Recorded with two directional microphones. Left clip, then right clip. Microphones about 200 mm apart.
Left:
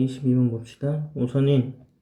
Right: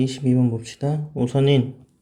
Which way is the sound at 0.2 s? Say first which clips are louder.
Right 3 dB; 60° right (ahead or behind).